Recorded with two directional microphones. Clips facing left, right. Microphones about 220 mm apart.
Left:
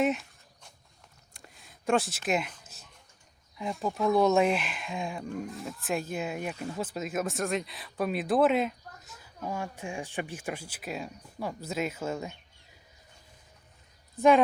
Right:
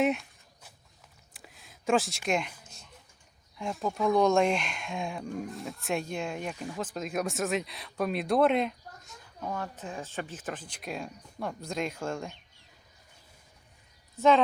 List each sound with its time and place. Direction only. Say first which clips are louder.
0.0 s a sound: even; centre (ahead or behind)
2.7 s dog: right 1 dB; 5° left (ahead or behind)
3.6 s speech: even; centre (ahead or behind)
14.2 s speech: left 2 dB; 10° left (ahead or behind)